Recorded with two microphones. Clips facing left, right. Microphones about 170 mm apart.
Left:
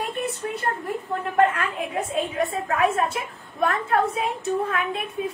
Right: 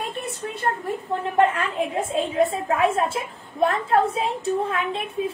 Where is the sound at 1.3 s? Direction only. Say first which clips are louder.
Even; 25° right (ahead or behind).